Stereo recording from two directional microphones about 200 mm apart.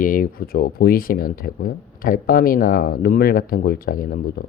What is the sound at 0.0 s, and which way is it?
Speech, 45° left (ahead or behind).